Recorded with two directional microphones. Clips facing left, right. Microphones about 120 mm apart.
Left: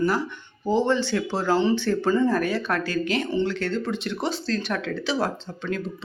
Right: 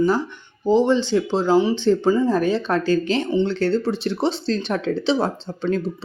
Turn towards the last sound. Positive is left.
turn(degrees=-30)  # may be behind; listen again after turning